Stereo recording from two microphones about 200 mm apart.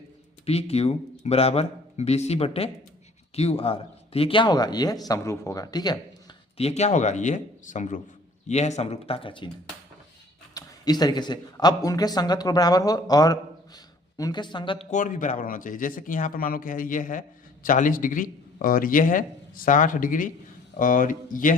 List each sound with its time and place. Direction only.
0.4 s a man's voice: 30° left (ahead or behind)
6.6 s speech: 35° left (ahead or behind)
10.5 s speech: 20° left (ahead or behind); by 21.5 s 45° left (ahead or behind)